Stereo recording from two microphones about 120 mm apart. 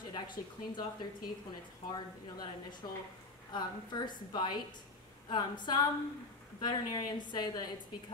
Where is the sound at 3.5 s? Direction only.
40° left (ahead or behind).